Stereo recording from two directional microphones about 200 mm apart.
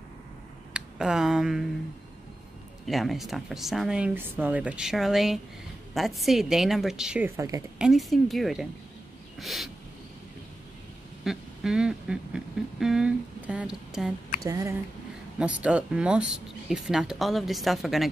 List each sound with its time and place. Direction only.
0.7 s speech: 5° right (ahead or behind)
2.9 s speech: centre (ahead or behind); by 7.6 s 15° right (ahead or behind)
7.8 s speech: centre (ahead or behind)
11.2 s a sound: 5° right (ahead or behind)
14.4 s speech: 15° right (ahead or behind)
15.3 s speech: 5° right (ahead or behind)